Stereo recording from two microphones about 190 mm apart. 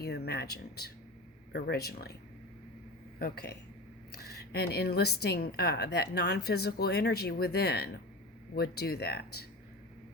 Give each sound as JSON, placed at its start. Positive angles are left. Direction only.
{"t": 0.0, "sound": "a woman's voice", "side_deg": 60}
{"t": 3.2, "sound": "a woman's voice", "side_deg": 55}